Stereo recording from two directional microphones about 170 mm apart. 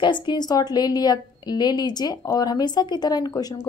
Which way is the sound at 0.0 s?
25° left (ahead or behind).